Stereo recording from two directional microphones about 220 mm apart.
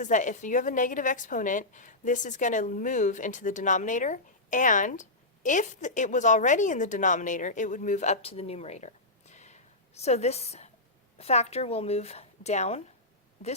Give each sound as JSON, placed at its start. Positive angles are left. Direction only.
{"t": 0.0, "sound": "a woman's voice", "side_deg": 35}